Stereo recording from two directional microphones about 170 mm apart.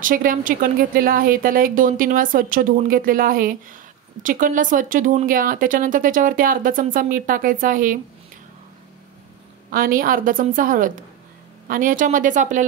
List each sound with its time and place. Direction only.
0.0 s speech: 55° right (ahead or behind)
9.7 s speech: 55° right (ahead or behind)